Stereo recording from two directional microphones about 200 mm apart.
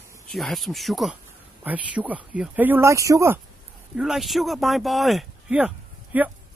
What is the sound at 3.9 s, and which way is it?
Speech, centre (ahead or behind).